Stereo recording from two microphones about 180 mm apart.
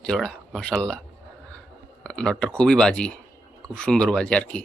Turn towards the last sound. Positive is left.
turn(degrees=5)  # may be behind; listen again after turning